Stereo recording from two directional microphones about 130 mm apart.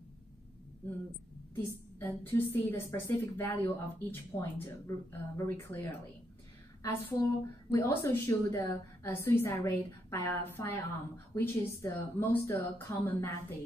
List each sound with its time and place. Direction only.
2.0 s a woman's voice: 15° left (ahead or behind)